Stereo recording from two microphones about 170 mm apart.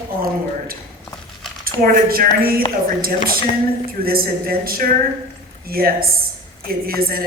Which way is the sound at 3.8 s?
60° right (ahead or behind).